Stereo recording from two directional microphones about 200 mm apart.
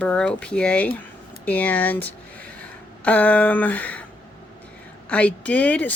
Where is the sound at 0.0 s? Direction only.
5° left (ahead or behind).